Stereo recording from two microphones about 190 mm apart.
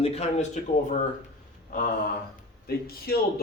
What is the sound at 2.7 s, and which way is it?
Speech, 55° left (ahead or behind).